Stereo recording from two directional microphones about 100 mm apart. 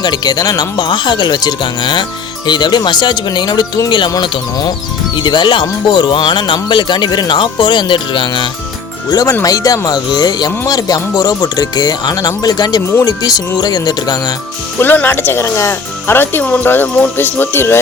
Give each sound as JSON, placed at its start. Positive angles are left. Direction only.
{"t": 0.0, "sound": "speech", "side_deg": 45}
{"t": 4.1, "sound": "speech", "side_deg": 40}
{"t": 9.0, "sound": "speech", "side_deg": 40}
{"t": 14.8, "sound": "speech", "side_deg": 20}